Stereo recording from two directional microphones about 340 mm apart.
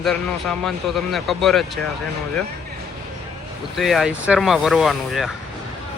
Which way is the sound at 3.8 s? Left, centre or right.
Centre.